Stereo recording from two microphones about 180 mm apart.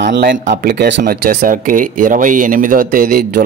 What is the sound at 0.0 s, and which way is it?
Speech, 70° right (ahead or behind).